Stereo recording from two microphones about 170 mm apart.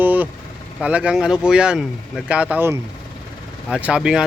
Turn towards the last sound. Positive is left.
turn(degrees=-5)  # may be behind; listen again after turning